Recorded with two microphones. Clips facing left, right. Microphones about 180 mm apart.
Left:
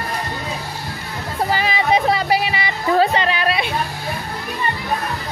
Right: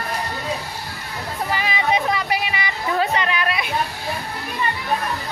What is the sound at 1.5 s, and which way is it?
Music, 35° left (ahead or behind).